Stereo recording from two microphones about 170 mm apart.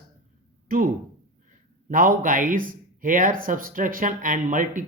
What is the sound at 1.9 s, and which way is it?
Speech, 55° right (ahead or behind).